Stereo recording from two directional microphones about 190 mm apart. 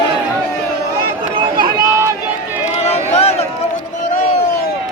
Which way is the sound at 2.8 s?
35° left (ahead or behind).